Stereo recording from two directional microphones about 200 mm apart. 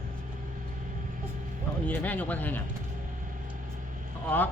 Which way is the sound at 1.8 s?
10° left (ahead or behind).